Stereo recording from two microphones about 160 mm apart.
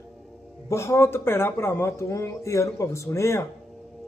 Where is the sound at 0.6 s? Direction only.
15° left (ahead or behind).